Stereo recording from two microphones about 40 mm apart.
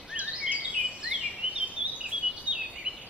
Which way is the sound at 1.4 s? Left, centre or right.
Right.